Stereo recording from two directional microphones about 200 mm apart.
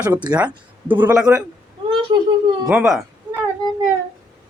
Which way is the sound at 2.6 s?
5° right (ahead or behind).